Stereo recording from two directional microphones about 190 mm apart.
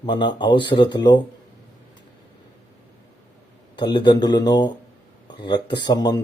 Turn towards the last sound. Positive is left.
turn(degrees=20)  # may be behind; listen again after turning